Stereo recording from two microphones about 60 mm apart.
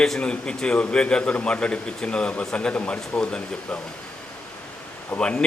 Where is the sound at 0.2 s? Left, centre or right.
Centre.